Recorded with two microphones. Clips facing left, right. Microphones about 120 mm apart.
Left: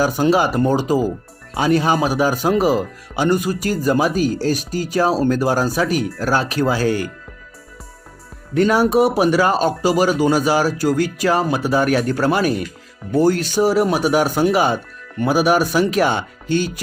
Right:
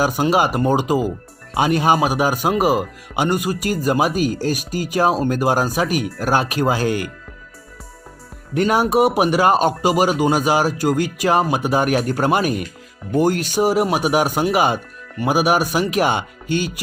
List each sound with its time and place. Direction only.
0.0 s speech: 15° right (ahead or behind)
8.6 s speech: 15° right (ahead or behind)
9.4 s speech: 50° right (ahead or behind)
9.9 s speech: 15° right (ahead or behind)